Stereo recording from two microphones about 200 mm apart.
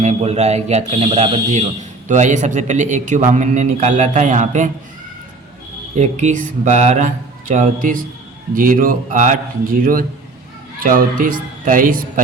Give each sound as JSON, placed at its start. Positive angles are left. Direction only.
{"t": 0.0, "sound": "speech", "side_deg": -35}
{"t": 6.0, "sound": "speech", "side_deg": -35}